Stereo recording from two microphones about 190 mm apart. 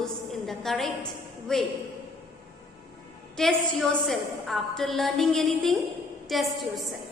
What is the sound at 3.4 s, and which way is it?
A woman's voice, centre (ahead or behind).